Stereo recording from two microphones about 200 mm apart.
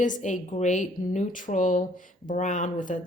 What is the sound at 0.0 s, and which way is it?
Speech, 40° left (ahead or behind).